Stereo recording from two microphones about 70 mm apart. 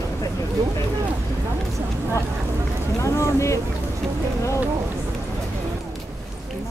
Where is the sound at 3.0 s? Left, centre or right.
Left.